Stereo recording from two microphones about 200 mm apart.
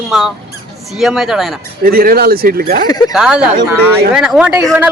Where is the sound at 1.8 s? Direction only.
50° right (ahead or behind).